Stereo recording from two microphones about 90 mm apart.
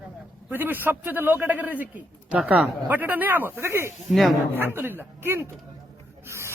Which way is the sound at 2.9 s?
20° right (ahead or behind).